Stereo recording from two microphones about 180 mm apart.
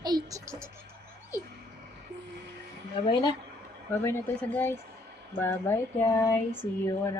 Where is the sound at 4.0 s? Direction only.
15° left (ahead or behind).